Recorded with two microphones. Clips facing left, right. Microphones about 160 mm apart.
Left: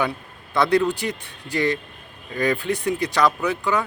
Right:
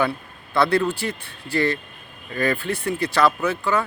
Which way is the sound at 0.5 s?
15° left (ahead or behind).